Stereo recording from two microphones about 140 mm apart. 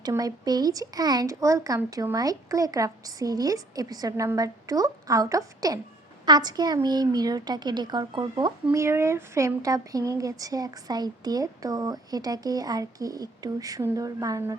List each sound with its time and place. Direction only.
0.0 s speech: 25° right (ahead or behind)
8.7 s speech: 20° right (ahead or behind)